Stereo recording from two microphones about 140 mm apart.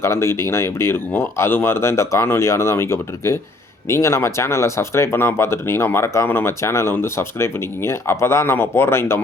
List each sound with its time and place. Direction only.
0.0 s speech: 20° left (ahead or behind)